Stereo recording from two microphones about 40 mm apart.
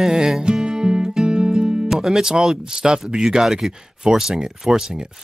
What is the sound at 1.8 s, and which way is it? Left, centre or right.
Speech, centre.